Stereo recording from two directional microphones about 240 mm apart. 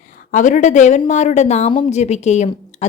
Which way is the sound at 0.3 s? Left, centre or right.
Left.